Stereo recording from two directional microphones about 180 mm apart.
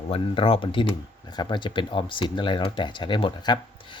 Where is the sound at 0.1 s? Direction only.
30° left (ahead or behind).